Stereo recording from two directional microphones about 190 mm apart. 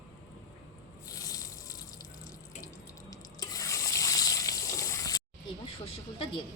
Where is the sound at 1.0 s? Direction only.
20° left (ahead or behind).